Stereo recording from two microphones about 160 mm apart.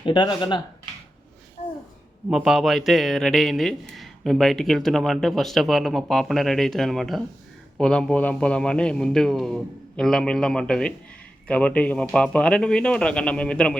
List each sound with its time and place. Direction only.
0.0 s speech: 30° left (ahead or behind)
2.3 s a man's voice: 5° right (ahead or behind)